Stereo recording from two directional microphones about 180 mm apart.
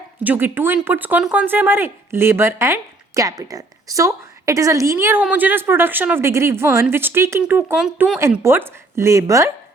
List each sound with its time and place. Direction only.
0.2 s speech: 10° right (ahead or behind)
8.2 s speech: 15° right (ahead or behind)